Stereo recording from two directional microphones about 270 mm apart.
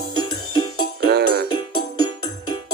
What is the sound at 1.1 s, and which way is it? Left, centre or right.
Music, right.